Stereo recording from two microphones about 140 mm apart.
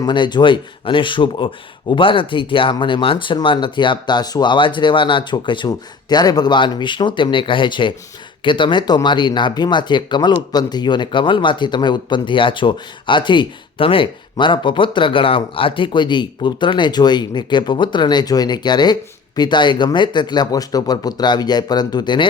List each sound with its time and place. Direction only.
0.0 s speech: 35° left (ahead or behind)